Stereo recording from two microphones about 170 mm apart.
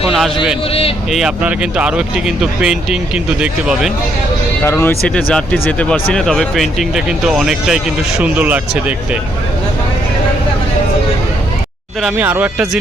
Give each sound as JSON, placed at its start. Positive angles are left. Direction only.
{"t": 0.7, "sound": "speech", "side_deg": 35}
{"t": 1.1, "sound": "speech", "side_deg": -5}
{"t": 4.6, "sound": "speech", "side_deg": 15}
{"t": 12.0, "sound": "speech", "side_deg": -10}